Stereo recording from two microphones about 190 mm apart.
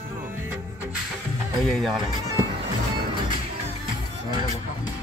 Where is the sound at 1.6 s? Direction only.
Centre (ahead or behind).